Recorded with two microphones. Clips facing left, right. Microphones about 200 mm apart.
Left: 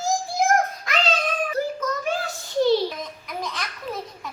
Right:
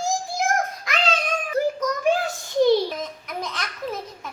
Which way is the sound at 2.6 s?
15° right (ahead or behind).